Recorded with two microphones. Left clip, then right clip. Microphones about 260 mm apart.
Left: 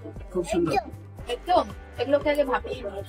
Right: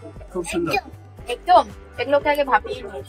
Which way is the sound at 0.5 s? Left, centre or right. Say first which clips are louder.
Right 2 dB; centre.